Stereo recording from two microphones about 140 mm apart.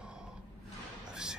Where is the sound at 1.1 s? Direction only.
5° right (ahead or behind).